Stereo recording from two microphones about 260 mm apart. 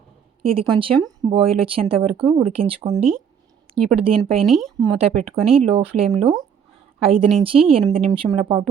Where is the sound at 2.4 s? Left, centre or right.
Right.